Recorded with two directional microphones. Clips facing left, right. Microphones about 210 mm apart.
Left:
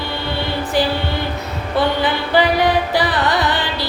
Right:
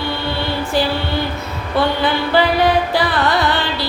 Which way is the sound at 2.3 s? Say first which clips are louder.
Even; 20° left (ahead or behind).